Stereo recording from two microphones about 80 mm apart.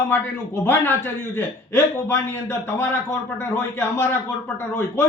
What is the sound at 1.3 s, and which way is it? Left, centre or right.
A man's voice, left.